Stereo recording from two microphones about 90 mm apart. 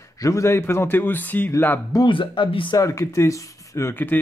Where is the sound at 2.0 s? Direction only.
65° left (ahead or behind).